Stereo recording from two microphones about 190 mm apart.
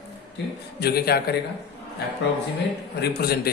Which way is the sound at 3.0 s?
55° left (ahead or behind).